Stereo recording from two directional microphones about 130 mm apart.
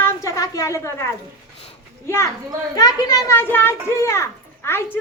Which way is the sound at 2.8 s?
30° left (ahead or behind).